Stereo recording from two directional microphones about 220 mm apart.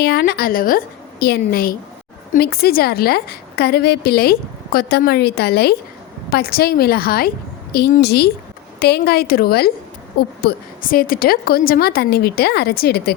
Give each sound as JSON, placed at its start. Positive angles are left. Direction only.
{"t": 0.0, "sound": "a woman's voice", "side_deg": 45}